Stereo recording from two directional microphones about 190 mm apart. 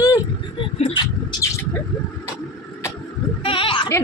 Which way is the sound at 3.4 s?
25° left (ahead or behind).